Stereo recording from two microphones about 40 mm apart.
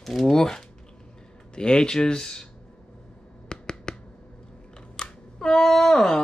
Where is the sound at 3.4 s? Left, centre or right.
Left.